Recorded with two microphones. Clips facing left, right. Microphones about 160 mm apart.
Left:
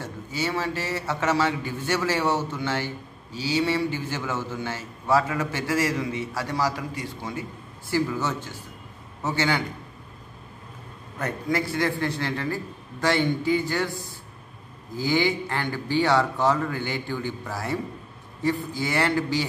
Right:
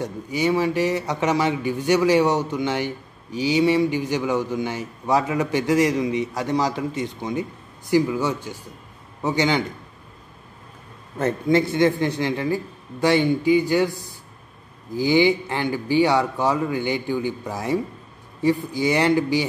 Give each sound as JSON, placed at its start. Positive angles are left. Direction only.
{"t": 0.0, "sound": "a man's voice", "side_deg": -15}
{"t": 11.1, "sound": "a man's voice", "side_deg": -25}